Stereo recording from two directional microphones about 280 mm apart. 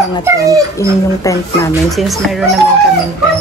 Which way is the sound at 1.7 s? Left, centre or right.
Centre.